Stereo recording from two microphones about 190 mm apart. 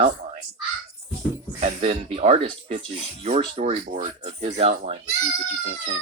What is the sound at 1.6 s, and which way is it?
Speech, 35° right (ahead or behind).